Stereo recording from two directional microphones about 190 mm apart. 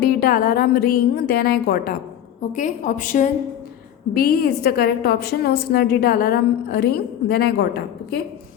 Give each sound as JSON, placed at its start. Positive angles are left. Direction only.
{"t": 0.0, "sound": "a woman's voice", "side_deg": 50}
{"t": 2.5, "sound": "a woman's voice", "side_deg": 40}
{"t": 4.1, "sound": "a woman's voice", "side_deg": 55}